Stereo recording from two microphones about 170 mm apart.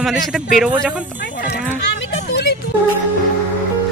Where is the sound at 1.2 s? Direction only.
90° left.